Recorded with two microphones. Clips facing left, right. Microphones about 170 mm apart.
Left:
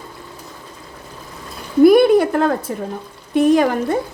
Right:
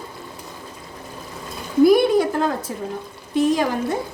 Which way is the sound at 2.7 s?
60° left (ahead or behind).